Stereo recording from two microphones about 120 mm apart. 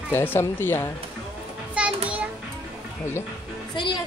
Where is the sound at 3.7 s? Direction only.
40° left (ahead or behind).